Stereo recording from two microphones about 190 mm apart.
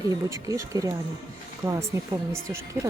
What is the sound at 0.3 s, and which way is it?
Speech, 15° right (ahead or behind).